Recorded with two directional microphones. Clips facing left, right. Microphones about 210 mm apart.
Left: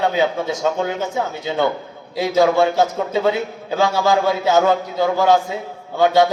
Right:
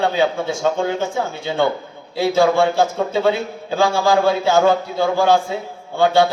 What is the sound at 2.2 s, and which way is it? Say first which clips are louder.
A man's voice: even; 20° left (ahead or behind).